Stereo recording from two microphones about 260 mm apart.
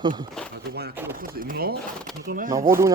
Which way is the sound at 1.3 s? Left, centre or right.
Right.